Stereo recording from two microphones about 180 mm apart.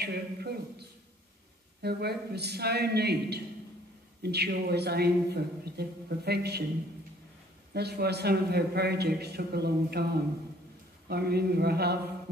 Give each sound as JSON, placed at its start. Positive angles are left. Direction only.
{"t": 0.0, "sound": "a man's voice", "side_deg": -65}
{"t": 7.7, "sound": "a man's voice", "side_deg": -65}
{"t": 11.1, "sound": "a man's voice", "side_deg": -60}